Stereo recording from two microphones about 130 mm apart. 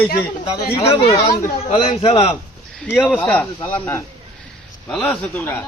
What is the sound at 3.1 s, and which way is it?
Speech, 10° left (ahead or behind).